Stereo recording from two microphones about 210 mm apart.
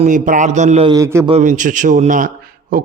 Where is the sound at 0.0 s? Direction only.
35° right (ahead or behind).